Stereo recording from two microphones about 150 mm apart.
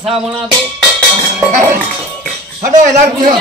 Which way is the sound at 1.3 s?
10° right (ahead or behind).